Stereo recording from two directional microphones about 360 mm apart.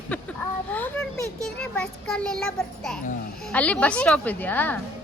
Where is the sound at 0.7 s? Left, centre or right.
Centre.